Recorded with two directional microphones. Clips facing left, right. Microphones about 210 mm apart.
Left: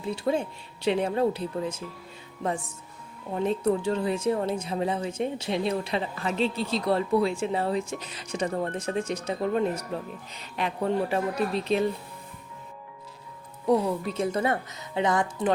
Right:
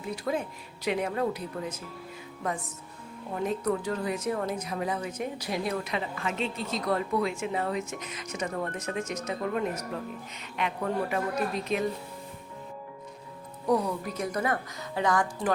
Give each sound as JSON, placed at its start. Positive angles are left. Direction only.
{"t": 0.0, "sound": "a woman's voice", "side_deg": 30}
{"t": 13.7, "sound": "a woman's voice", "side_deg": 25}